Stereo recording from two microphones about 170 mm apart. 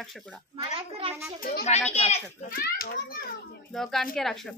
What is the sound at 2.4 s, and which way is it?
Speech, 60° left (ahead or behind).